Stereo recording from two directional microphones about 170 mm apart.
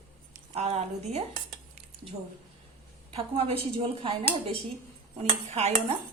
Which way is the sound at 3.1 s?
35° right (ahead or behind).